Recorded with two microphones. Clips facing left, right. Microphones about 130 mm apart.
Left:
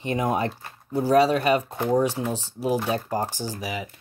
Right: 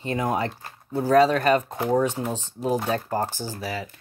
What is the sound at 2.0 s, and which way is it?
Speech, 10° left (ahead or behind).